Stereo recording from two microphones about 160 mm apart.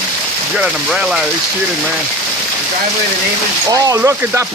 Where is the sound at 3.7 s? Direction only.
20° right (ahead or behind).